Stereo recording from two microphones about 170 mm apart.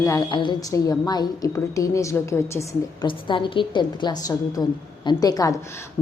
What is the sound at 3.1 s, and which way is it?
A woman's voice, 30° left (ahead or behind).